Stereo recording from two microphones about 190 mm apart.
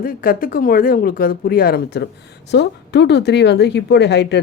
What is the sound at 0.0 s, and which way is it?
Speech, 50° left (ahead or behind).